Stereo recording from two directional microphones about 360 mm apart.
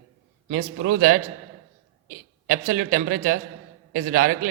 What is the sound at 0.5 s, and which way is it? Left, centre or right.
Speech, right.